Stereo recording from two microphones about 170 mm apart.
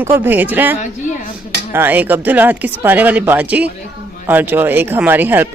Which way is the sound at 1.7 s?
10° right (ahead or behind).